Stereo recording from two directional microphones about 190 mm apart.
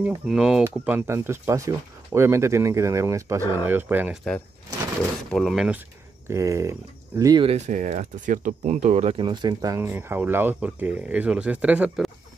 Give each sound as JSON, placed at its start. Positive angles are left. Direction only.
{"t": 0.0, "sound": "speech", "side_deg": -5}
{"t": 5.3, "sound": "speech", "side_deg": 0}
{"t": 6.2, "sound": "speech", "side_deg": -15}
{"t": 7.4, "sound": "speech", "side_deg": -35}